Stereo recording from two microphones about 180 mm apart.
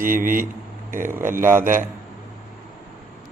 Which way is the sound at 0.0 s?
50° right (ahead or behind).